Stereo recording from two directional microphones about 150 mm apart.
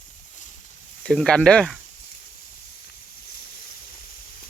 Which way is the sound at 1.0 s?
5° left (ahead or behind).